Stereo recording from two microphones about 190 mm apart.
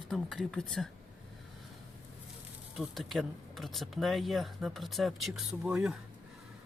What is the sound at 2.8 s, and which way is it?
Speech, centre (ahead or behind).